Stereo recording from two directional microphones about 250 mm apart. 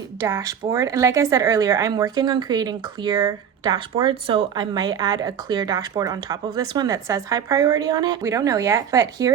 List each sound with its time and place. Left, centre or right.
0.2 s speech: centre